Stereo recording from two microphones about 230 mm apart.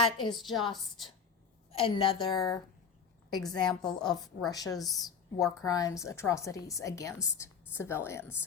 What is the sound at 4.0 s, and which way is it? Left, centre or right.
A woman's voice, centre.